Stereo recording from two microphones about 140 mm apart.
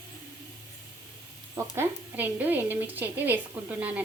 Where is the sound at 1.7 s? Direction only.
15° right (ahead or behind).